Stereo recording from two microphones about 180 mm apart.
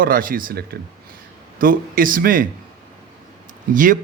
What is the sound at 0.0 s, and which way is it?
Speech, 50° right (ahead or behind).